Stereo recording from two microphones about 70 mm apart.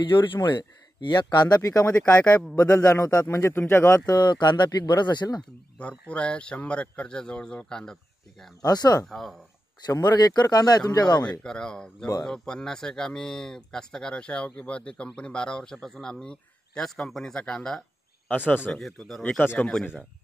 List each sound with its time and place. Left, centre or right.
0.1 s speech: left
1.6 s speech: left
2.0 s a man's voice: left
2.7 s a man's voice: left
3.3 s speech: left
4.0 s speech: left
5.8 s speech: centre
8.6 s speech: left
9.0 s speech: centre
9.8 s speech: left
11.2 s speech: centre
19.4 s a man's voice: left